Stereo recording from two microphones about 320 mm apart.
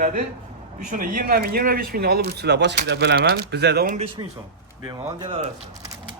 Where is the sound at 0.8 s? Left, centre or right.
Right.